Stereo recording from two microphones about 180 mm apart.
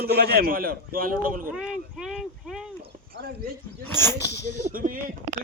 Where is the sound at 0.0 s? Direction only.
60° right (ahead or behind).